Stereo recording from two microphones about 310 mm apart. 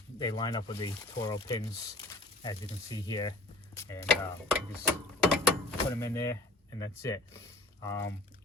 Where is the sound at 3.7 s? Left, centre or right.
Centre.